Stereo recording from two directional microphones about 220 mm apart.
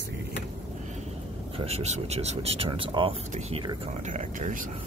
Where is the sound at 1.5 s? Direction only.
30° right (ahead or behind).